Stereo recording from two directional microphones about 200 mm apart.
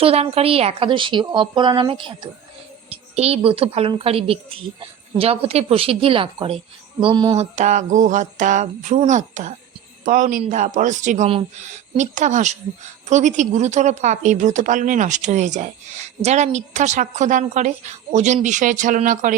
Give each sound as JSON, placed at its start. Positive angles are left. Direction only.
{"t": 0.0, "sound": "a woman's voice", "side_deg": -30}